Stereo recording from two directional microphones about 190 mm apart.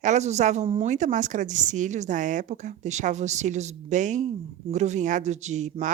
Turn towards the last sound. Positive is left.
turn(degrees=-40)  # may be behind; listen again after turning